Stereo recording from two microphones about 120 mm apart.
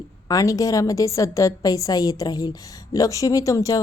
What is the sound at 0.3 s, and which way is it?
A woman's voice, 25° left (ahead or behind).